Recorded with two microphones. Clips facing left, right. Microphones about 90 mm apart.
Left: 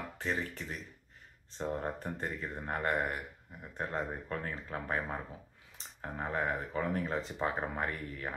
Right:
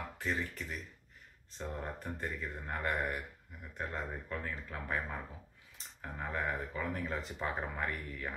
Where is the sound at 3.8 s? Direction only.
35° left (ahead or behind).